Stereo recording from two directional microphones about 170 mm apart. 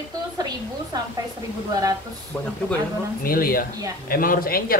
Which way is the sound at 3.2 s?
60° left (ahead or behind).